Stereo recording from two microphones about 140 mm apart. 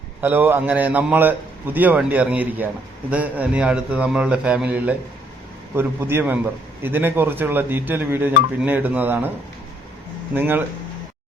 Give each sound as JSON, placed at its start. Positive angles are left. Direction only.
{"t": 0.2, "sound": "speech", "side_deg": -15}
{"t": 10.3, "sound": "speech", "side_deg": -15}